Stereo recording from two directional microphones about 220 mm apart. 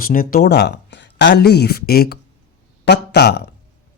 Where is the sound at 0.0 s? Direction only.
40° left (ahead or behind).